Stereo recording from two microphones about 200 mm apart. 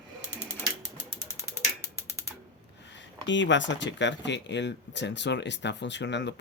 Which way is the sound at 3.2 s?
65° left (ahead or behind).